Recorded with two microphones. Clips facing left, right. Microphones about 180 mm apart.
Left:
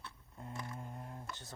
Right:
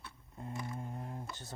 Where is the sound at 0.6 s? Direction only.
15° right (ahead or behind).